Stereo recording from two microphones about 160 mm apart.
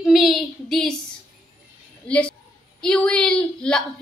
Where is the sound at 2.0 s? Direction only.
5° left (ahead or behind).